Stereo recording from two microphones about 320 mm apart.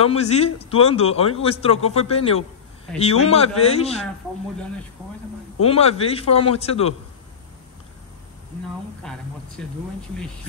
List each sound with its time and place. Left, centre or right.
0.0 s a man's voice: centre
5.7 s a man's voice: centre
9.0 s speech: centre